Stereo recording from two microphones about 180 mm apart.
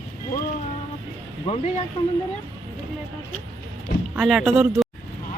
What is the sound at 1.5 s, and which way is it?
Speech, 35° left (ahead or behind).